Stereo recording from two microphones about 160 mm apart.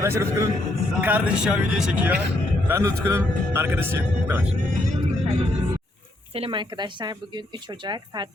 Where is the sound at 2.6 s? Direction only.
20° right (ahead or behind).